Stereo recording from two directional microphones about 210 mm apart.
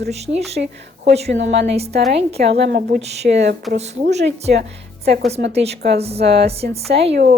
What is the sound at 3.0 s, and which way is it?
Speech, 30° right (ahead or behind).